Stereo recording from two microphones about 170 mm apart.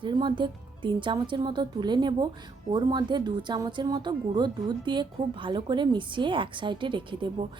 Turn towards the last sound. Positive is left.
turn(degrees=-30)  # may be behind; listen again after turning